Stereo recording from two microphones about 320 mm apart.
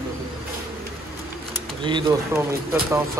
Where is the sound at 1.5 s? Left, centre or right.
Centre.